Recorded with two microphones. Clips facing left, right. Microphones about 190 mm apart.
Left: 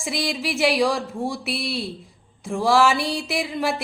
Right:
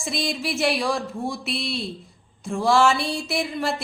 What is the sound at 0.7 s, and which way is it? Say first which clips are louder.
Speech: left 6 dB; 90° left.